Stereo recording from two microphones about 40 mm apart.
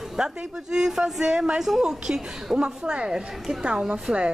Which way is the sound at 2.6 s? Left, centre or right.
Right.